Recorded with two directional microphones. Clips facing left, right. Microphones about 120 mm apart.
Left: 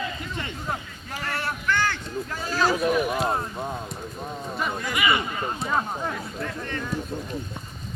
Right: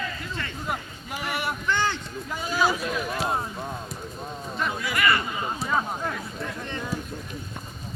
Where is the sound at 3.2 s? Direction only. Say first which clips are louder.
Left 2 dB; centre (ahead or behind).